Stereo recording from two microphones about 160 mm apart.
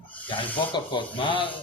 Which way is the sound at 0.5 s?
30° left (ahead or behind).